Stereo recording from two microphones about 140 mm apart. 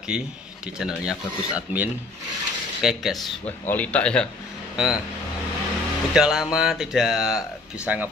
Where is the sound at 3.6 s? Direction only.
10° left (ahead or behind).